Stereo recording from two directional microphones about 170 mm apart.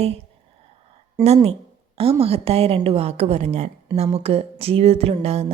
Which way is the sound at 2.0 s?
35° right (ahead or behind).